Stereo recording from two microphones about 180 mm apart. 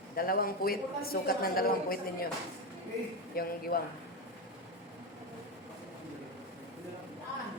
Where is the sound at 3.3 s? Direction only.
55° left (ahead or behind).